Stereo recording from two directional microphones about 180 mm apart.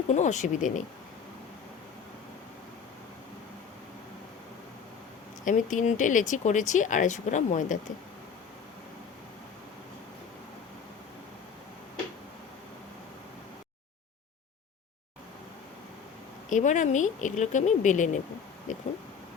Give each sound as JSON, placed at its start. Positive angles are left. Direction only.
{"t": 0.1, "sound": "speech", "side_deg": 40}
{"t": 5.5, "sound": "speech", "side_deg": 45}
{"t": 16.5, "sound": "speech", "side_deg": 45}